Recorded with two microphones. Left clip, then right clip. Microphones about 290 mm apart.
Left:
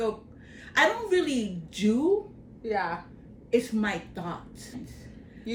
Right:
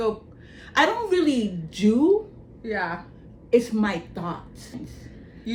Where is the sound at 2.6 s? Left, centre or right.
Centre.